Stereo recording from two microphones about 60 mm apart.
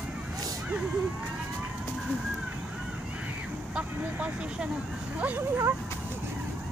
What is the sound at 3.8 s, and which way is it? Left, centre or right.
Speech, right.